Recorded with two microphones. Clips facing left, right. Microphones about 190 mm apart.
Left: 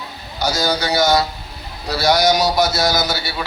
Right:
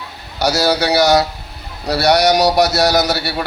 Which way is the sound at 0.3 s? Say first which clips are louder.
Right 4 dB; 70° right (ahead or behind).